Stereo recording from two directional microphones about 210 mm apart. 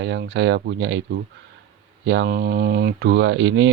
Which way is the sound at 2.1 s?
55° right (ahead or behind).